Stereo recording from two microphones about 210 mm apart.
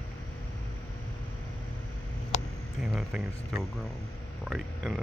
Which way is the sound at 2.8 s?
Centre (ahead or behind).